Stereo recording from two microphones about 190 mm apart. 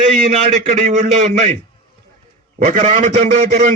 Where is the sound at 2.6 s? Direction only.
40° right (ahead or behind).